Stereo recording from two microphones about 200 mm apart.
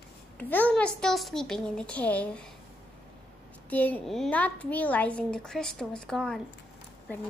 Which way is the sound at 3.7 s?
10° left (ahead or behind).